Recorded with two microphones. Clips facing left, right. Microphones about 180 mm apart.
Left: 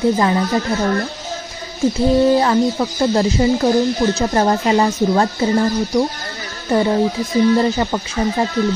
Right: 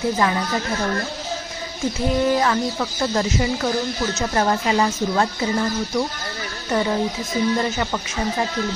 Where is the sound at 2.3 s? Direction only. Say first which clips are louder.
Left 6 dB; 30° left (ahead or behind).